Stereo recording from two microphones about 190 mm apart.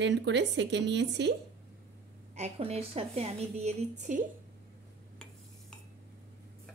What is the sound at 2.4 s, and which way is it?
A woman's voice, 30° right (ahead or behind).